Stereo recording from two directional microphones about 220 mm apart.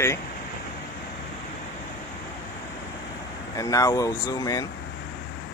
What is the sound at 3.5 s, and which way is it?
Speech, 15° left (ahead or behind).